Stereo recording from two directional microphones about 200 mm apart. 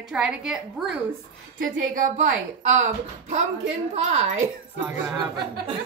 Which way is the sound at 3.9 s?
35° right (ahead or behind).